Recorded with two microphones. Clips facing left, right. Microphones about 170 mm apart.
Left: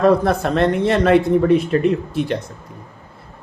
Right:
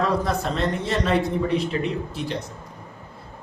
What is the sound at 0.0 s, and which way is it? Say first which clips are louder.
A man's voice: left 8 dB; 60° left (ahead or behind).